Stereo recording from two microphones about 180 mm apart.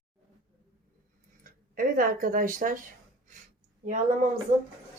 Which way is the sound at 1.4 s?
50° right (ahead or behind).